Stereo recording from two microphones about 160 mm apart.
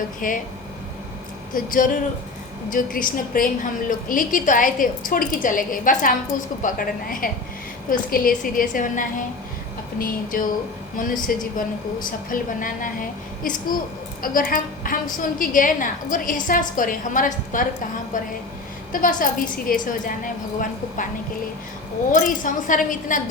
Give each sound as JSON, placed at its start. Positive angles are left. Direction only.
{"t": 0.2, "sound": "a woman's voice", "side_deg": 60}
{"t": 1.5, "sound": "a woman's voice", "side_deg": 55}
{"t": 18.9, "sound": "a woman's voice", "side_deg": 60}
{"t": 22.1, "sound": "a woman's voice", "side_deg": 55}